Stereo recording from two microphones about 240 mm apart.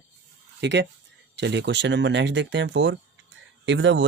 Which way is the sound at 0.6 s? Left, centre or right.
Right.